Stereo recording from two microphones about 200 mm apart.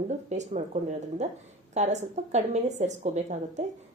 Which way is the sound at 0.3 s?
35° right (ahead or behind).